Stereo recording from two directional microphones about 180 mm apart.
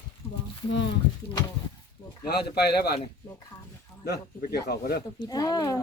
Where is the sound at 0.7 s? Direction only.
80° left.